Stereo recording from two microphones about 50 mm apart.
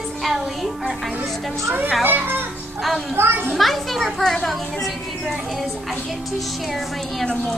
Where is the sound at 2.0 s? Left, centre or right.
Right.